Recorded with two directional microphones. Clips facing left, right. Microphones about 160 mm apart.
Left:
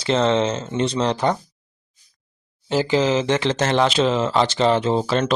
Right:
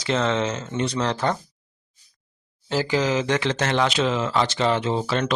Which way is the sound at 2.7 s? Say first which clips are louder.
Left 4 dB; 20° left (ahead or behind).